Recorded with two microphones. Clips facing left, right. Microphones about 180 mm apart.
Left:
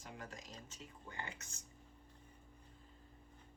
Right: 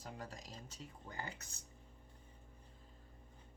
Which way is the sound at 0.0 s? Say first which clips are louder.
Right 2 dB; 35° right (ahead or behind).